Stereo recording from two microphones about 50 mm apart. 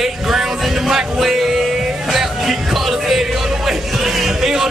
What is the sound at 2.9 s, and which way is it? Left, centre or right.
Music, centre.